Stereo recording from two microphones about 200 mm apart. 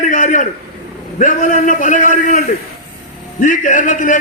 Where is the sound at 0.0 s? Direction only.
40° left (ahead or behind).